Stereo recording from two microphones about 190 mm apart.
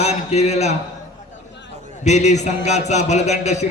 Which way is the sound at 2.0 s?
35° left (ahead or behind).